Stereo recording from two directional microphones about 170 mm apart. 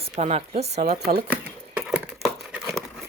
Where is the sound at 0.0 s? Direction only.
40° right (ahead or behind).